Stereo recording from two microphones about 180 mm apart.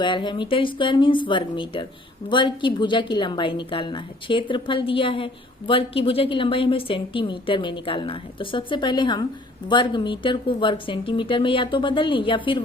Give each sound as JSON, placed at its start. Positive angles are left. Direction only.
{"t": 0.0, "sound": "a woman's voice", "side_deg": 25}